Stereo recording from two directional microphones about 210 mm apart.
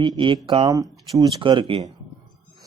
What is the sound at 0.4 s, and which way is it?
Speech, 25° right (ahead or behind).